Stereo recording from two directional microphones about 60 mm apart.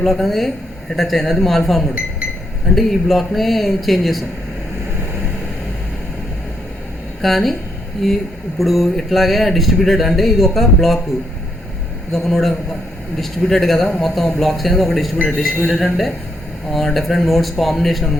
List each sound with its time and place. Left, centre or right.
0.0 s a man's voice: centre
7.2 s a man's voice: centre
12.1 s a man's voice: centre